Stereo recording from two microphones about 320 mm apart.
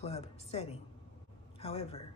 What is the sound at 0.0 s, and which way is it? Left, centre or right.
Speech, centre.